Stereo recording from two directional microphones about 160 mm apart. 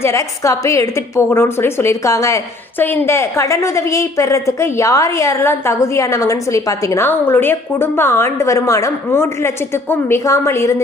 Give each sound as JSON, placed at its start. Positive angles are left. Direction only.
{"t": 0.0, "sound": "a woman's voice", "side_deg": 20}